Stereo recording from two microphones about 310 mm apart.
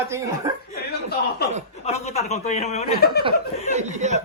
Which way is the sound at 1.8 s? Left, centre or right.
Left.